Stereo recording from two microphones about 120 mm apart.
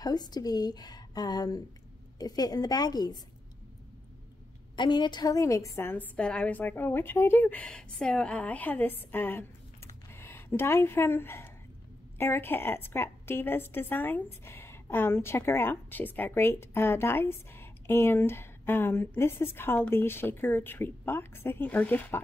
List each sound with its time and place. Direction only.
0.0 s speech: 35° left (ahead or behind)
4.7 s a woman's voice: 40° left (ahead or behind); by 6.0 s 20° left (ahead or behind)
6.1 s a woman's voice: 10° left (ahead or behind)